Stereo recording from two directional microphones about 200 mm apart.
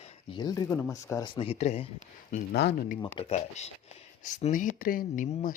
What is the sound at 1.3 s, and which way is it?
Speech, 30° left (ahead or behind).